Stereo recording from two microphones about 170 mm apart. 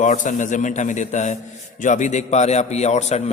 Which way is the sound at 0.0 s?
45° left (ahead or behind).